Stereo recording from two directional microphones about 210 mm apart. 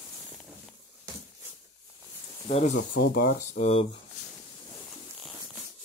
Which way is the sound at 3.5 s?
30° left (ahead or behind).